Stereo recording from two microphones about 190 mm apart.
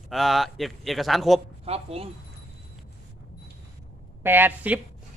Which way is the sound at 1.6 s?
30° right (ahead or behind).